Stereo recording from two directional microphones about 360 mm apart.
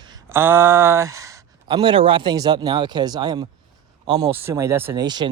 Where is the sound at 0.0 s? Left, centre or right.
Centre.